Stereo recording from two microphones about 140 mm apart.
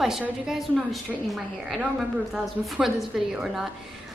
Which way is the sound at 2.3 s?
Centre (ahead or behind).